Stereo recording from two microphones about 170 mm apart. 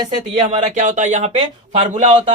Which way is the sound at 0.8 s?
45° right (ahead or behind).